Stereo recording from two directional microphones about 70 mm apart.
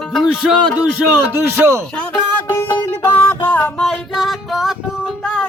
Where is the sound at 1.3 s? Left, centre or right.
Right.